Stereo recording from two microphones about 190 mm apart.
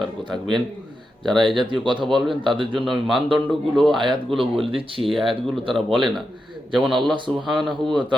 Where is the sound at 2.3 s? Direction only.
25° right (ahead or behind).